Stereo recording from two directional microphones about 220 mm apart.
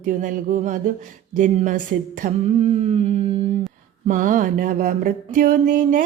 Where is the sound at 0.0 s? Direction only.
40° right (ahead or behind).